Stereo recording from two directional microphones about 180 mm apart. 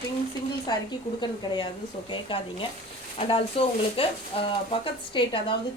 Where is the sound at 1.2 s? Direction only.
25° left (ahead or behind).